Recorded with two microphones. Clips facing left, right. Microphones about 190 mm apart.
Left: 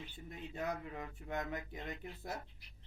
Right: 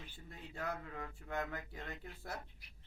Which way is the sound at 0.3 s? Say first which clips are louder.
Left 3 dB; 20° left (ahead or behind).